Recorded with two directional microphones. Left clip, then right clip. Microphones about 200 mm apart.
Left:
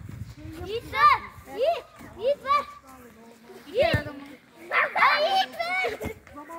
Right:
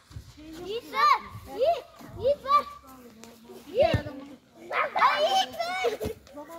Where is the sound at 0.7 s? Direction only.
15° left (ahead or behind).